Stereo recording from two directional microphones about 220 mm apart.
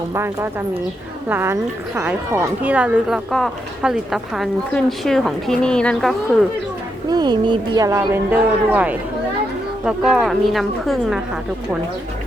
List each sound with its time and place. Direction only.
0.1 s speech: 15° right (ahead or behind); by 6.1 s 5° left (ahead or behind)
7.1 s speech: 20° right (ahead or behind); by 11.2 s centre (ahead or behind)